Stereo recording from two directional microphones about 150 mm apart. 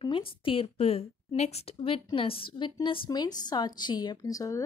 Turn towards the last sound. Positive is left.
turn(degrees=20)  # may be behind; listen again after turning